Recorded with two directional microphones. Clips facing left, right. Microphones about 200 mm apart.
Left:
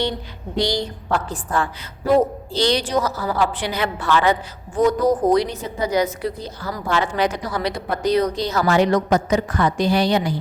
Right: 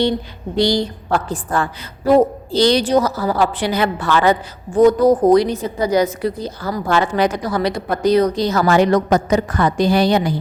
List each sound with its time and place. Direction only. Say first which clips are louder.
0.5 s a woman's voice: right 5 dB; 30° right (ahead or behind)
2.1 s a woman's voice: right 4 dB; 35° right (ahead or behind)